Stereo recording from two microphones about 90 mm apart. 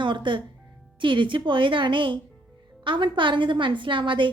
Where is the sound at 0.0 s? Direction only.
60° right (ahead or behind).